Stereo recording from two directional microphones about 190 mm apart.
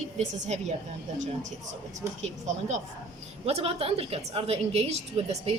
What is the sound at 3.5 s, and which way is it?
A woman's voice, 30° right (ahead or behind).